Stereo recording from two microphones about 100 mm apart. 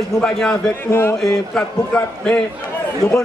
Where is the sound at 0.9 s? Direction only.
25° left (ahead or behind).